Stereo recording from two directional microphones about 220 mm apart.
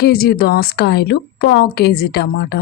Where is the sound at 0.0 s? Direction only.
45° left (ahead or behind).